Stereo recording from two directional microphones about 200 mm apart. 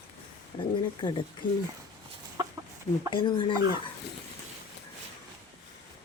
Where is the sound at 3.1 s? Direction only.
25° left (ahead or behind).